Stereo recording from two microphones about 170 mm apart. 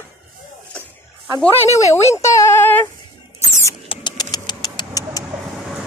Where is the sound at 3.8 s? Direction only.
25° left (ahead or behind).